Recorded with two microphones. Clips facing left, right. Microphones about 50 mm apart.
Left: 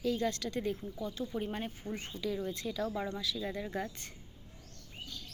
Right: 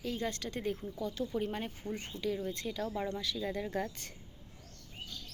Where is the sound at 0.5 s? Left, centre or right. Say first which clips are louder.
Left 1 dB; right.